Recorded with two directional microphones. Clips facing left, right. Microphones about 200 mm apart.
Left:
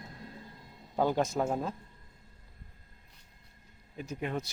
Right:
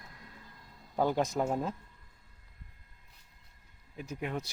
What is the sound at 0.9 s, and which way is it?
Speech, centre (ahead or behind).